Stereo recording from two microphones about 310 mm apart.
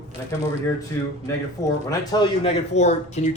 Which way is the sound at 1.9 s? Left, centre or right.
Centre.